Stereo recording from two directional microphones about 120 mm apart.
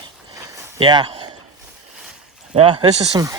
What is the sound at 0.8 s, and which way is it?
Speech, 40° right (ahead or behind).